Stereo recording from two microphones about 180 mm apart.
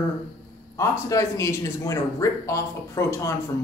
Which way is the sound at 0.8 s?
15° left (ahead or behind).